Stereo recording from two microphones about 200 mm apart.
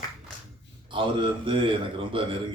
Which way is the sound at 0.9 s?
25° right (ahead or behind).